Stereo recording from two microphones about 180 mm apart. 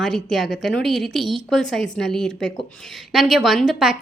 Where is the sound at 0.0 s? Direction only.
Centre (ahead or behind).